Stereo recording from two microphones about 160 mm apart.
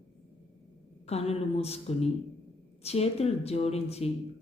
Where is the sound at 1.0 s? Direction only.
40° left (ahead or behind).